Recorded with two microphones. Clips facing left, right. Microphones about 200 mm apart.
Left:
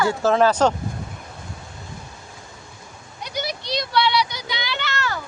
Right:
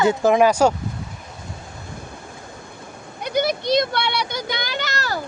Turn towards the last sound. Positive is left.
turn(degrees=-40)  # may be behind; listen again after turning